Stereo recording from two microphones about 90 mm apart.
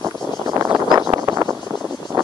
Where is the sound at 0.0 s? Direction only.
35° right (ahead or behind).